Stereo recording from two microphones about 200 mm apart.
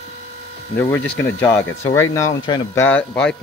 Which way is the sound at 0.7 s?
10° left (ahead or behind).